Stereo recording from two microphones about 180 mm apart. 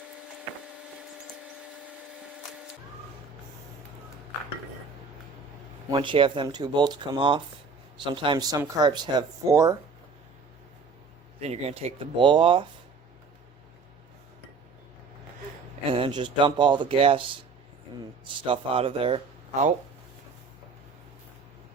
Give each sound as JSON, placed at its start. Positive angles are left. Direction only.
{"t": 0.3, "sound": "printer", "side_deg": -5}
{"t": 5.9, "sound": "speech", "side_deg": -25}
{"t": 11.3, "sound": "speech", "side_deg": -35}
{"t": 15.9, "sound": "speech", "side_deg": -30}
{"t": 18.4, "sound": "speech", "side_deg": -30}